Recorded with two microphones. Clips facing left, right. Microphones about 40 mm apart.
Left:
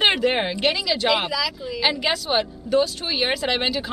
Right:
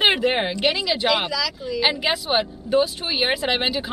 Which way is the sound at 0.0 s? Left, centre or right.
Centre.